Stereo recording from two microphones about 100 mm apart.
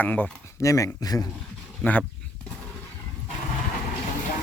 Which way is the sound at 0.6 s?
30° left (ahead or behind).